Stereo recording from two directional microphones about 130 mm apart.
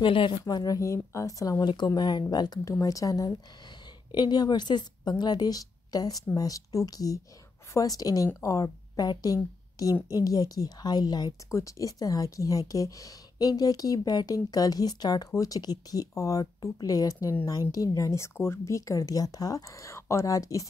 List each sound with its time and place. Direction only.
0.0 s a woman's voice: 40° left (ahead or behind); by 20.6 s 25° left (ahead or behind)